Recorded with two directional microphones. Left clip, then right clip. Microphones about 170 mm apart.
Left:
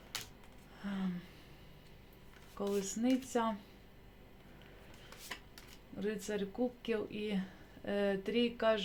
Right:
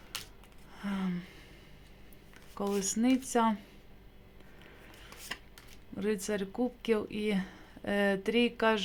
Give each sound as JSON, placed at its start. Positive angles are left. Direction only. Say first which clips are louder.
{"t": 0.8, "sound": "a sound", "louder": "right 5 dB", "side_deg": -30}
{"t": 2.6, "sound": "speech", "louder": "right 4 dB", "side_deg": -35}
{"t": 6.0, "sound": "speech", "louder": "right 5 dB", "side_deg": -40}